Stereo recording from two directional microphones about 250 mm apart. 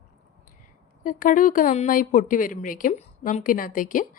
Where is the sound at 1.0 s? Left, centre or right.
Left.